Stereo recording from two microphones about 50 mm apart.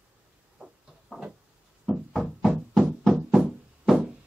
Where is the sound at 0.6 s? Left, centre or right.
Right.